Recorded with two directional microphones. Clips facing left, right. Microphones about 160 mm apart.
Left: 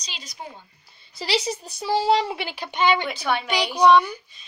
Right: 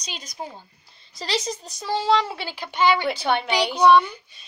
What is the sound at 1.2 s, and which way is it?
Speech, 10° left (ahead or behind).